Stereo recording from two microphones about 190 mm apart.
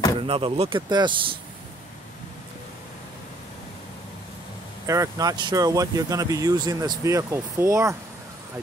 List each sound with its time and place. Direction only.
0.2 s speech: 30° right (ahead or behind)
4.8 s speech: 15° right (ahead or behind)